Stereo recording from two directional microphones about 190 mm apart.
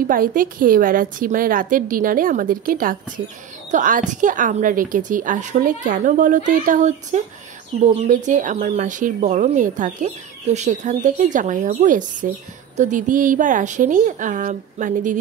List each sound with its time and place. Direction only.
0.1 s a woman's voice: 45° right (ahead or behind)